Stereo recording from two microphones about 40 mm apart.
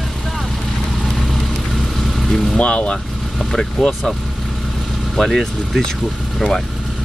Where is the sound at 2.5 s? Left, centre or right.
Left.